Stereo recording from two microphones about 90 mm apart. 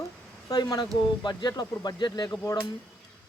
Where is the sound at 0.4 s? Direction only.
45° left (ahead or behind).